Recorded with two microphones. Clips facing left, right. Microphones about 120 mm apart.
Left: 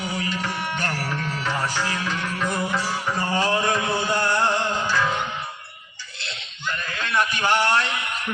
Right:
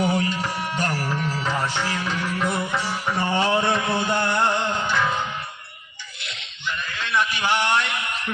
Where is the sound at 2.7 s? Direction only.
20° right (ahead or behind).